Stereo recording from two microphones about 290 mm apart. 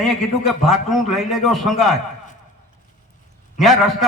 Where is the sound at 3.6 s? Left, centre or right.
Centre.